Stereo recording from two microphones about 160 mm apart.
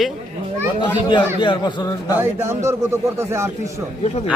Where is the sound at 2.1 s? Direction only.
15° right (ahead or behind).